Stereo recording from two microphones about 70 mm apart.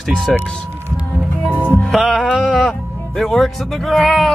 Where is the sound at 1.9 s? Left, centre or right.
Centre.